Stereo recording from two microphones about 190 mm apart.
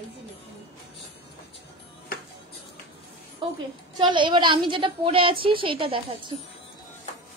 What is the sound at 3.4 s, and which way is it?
A woman's voice, 25° right (ahead or behind).